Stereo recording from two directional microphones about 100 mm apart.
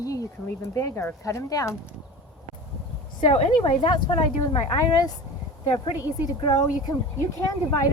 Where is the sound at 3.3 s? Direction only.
70° left (ahead or behind); by 4.2 s 55° left (ahead or behind).